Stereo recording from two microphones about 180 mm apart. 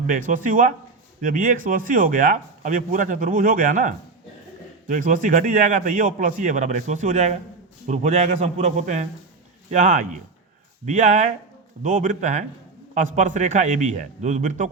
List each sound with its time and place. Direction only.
0.1 s a man's voice: 50° right (ahead or behind)